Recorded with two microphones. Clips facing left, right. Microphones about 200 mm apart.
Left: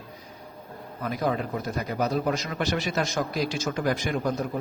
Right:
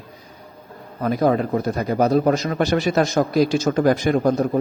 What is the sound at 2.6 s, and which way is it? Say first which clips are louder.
Speech: right 9 dB; 60° right (ahead or behind).